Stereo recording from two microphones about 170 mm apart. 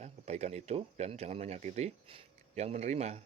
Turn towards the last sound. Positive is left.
turn(degrees=-40)  # may be behind; listen again after turning